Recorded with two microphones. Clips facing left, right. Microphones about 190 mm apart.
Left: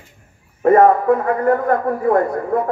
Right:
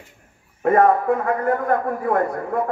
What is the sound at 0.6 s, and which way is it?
A man's voice, 35° left (ahead or behind).